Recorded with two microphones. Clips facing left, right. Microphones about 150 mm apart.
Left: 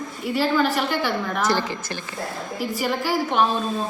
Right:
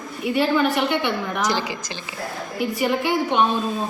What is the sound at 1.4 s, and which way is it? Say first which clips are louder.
Speech: left 2 dB; 15° right (ahead or behind).